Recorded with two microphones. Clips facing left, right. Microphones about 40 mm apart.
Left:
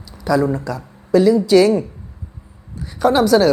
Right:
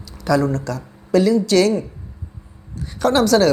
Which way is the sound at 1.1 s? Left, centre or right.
Centre.